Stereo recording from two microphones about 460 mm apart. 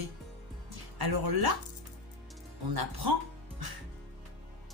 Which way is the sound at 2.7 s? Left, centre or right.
Right.